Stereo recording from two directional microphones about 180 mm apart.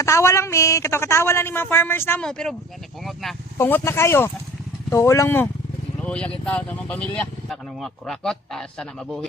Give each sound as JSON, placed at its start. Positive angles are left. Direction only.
{"t": 0.0, "sound": "a woman's voice", "side_deg": 15}
{"t": 3.0, "sound": "vehicle", "side_deg": 0}
{"t": 3.6, "sound": "a woman's voice", "side_deg": 15}